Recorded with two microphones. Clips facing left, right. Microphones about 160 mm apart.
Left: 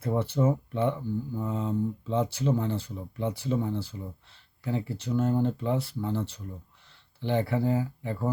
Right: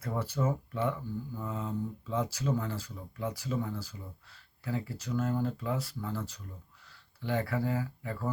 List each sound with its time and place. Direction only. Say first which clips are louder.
0.0 s speech: left 6 dB; 25° left (ahead or behind)